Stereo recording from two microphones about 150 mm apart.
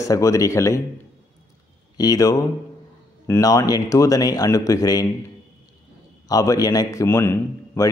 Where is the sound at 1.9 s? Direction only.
25° left (ahead or behind).